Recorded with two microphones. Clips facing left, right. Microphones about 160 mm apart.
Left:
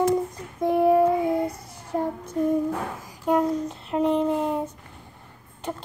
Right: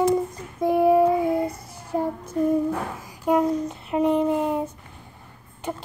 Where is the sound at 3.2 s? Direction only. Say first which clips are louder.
Right 1 dB; 10° right (ahead or behind).